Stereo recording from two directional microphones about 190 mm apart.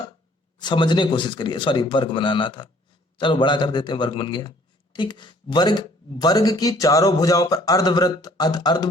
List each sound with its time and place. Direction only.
0.6 s speech: 25° left (ahead or behind)